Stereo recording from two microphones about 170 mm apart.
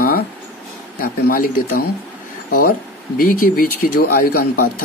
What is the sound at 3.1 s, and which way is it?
Speech, 55° left (ahead or behind).